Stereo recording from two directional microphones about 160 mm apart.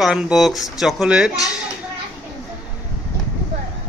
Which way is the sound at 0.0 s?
5° right (ahead or behind).